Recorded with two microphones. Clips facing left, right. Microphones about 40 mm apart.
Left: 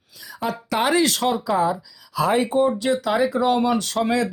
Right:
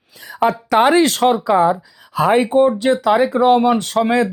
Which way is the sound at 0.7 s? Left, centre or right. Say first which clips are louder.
Right 6 dB; right.